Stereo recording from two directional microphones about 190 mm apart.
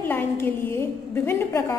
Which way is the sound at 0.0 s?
10° left (ahead or behind).